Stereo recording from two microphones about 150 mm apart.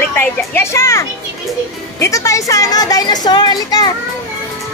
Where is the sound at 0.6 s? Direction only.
20° left (ahead or behind).